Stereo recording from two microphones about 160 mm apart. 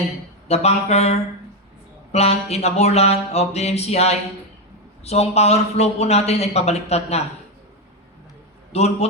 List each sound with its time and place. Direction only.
0.4 s speech: 40° left (ahead or behind)
2.1 s speech: 40° left (ahead or behind)
8.7 s speech: 40° left (ahead or behind)